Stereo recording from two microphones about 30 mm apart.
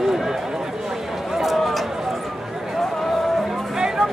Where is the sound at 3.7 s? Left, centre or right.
Right.